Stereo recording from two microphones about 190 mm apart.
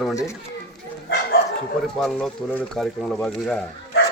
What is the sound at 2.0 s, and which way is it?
Speech, centre (ahead or behind).